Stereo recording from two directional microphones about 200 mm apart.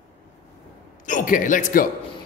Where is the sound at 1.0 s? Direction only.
40° left (ahead or behind).